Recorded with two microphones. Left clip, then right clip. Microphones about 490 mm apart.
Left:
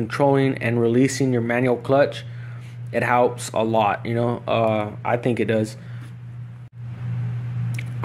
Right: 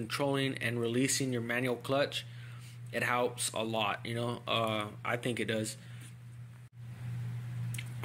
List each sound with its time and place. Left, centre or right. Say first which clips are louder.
0.1 s speech: left 14 dB; right